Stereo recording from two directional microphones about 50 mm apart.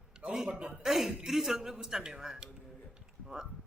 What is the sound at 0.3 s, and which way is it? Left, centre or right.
Speech, centre.